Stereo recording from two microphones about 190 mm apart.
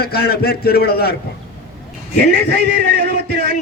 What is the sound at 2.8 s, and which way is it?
Music, 60° right (ahead or behind).